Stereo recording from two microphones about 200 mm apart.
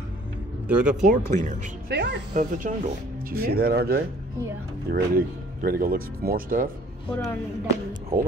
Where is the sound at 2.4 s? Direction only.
40° right (ahead or behind).